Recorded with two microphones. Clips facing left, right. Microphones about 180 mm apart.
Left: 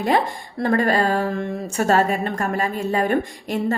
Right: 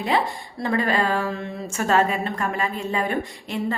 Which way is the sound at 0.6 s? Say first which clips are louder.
Left 4 dB; 45° left (ahead or behind).